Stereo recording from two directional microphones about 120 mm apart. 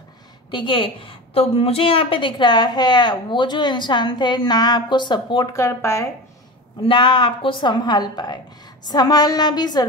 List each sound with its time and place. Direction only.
0.5 s a woman's voice: 40° left (ahead or behind)
5.5 s speech: 25° left (ahead or behind)
6.8 s a woman's voice: 45° left (ahead or behind)